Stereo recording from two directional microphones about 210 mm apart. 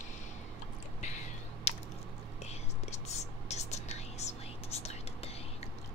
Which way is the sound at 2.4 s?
30° left (ahead or behind).